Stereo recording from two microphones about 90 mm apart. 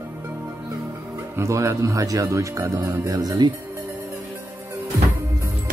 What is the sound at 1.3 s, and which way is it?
Speech, 30° right (ahead or behind).